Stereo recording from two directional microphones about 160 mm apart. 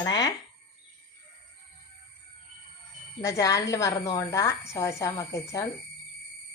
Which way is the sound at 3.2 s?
20° left (ahead or behind).